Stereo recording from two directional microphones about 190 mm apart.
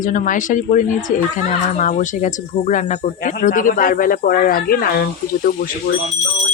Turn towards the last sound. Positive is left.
turn(degrees=50)  # may be behind; listen again after turning